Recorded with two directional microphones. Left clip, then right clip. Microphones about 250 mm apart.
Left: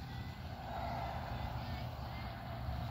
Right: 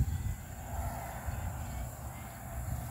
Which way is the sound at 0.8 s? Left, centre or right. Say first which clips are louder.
Even; right.